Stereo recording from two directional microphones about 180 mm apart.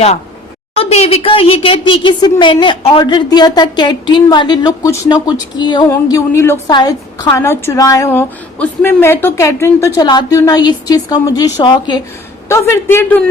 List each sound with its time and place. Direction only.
0.8 s a woman's voice: 35° left (ahead or behind); by 13.2 s 15° left (ahead or behind)